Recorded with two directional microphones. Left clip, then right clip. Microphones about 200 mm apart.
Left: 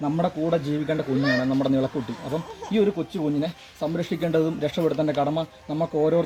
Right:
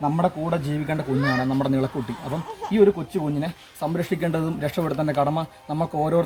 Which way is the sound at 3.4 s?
25° right (ahead or behind).